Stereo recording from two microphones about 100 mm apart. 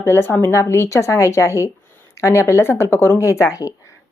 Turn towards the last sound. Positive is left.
turn(degrees=35)  # may be behind; listen again after turning